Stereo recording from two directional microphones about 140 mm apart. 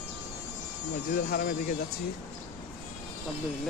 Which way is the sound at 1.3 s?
90° left.